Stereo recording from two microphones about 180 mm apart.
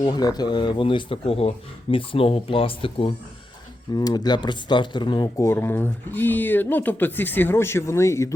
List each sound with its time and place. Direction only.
0.0 s speech: 20° left (ahead or behind)